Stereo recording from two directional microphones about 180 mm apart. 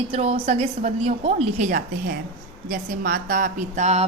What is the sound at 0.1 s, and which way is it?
A woman's voice, 35° right (ahead or behind).